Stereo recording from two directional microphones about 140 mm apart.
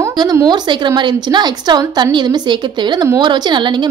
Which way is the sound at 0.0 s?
30° right (ahead or behind).